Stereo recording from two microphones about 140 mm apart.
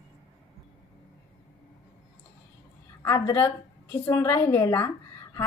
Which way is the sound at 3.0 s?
20° left (ahead or behind).